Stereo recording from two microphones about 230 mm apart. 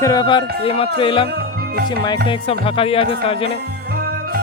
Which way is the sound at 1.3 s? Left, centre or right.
Right.